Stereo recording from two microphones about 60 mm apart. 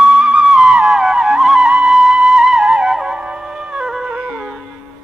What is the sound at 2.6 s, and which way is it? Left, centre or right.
Music, centre.